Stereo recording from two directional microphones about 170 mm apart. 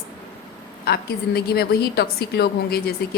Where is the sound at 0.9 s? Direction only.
70° left (ahead or behind).